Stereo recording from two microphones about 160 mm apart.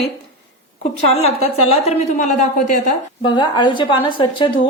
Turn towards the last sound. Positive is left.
turn(degrees=30)  # may be behind; listen again after turning